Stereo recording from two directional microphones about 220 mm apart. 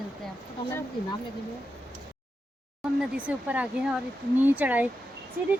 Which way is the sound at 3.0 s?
5° right (ahead or behind).